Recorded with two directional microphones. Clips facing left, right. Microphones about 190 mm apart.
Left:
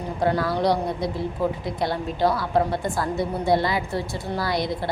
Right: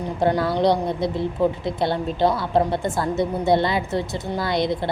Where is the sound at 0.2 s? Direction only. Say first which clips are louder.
Right 3 dB; 25° right (ahead or behind).